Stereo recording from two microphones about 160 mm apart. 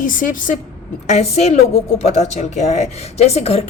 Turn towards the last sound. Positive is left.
turn(degrees=40)  # may be behind; listen again after turning